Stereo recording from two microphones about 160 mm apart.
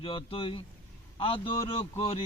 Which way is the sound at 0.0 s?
35° left (ahead or behind).